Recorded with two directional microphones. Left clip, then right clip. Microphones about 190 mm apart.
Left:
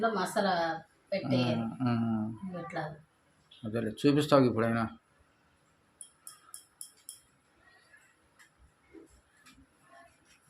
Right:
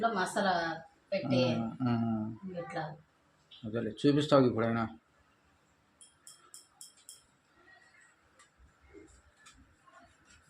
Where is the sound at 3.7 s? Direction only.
10° left (ahead or behind).